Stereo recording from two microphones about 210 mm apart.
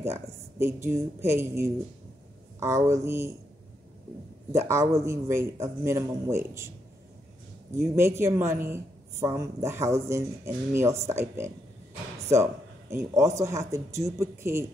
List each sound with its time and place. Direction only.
0.0 s a woman's voice: 10° right (ahead or behind)
4.5 s a woman's voice: 15° right (ahead or behind)
7.7 s a woman's voice: 10° right (ahead or behind)
12.9 s a woman's voice: 15° right (ahead or behind)